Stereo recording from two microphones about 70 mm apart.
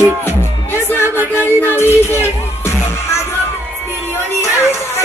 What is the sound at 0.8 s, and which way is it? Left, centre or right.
Music, left.